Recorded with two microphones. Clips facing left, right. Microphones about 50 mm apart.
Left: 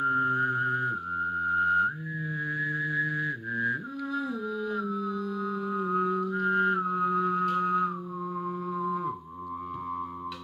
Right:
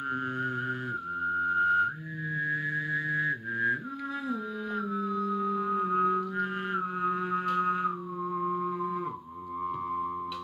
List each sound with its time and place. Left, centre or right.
0.0 s a sound: centre
2.4 s mantra: centre
8.4 s music: centre